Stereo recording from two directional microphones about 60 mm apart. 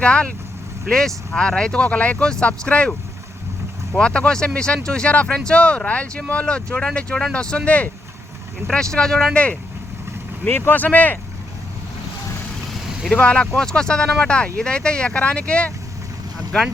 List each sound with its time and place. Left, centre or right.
0.0 s speech: centre
3.9 s speech: centre
8.7 s speech: centre
10.4 s speech: left
13.1 s speech: centre